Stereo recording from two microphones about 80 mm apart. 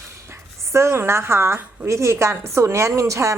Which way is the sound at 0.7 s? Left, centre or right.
Right.